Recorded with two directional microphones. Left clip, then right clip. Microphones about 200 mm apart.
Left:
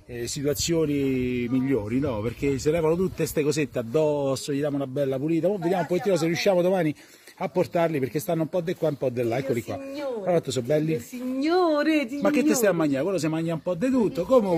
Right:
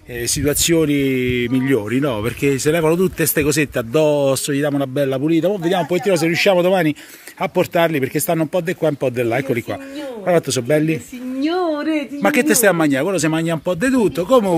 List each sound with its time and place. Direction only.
0.4 s speech: 10° right (ahead or behind)
11.3 s a sound: 35° left (ahead or behind)
12.2 s speech: 5° right (ahead or behind)